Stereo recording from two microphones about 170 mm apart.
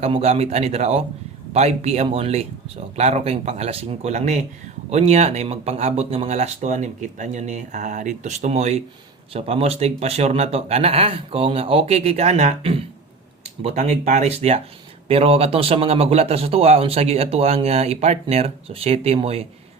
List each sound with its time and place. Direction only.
0.0 s a man's voice: 35° right (ahead or behind)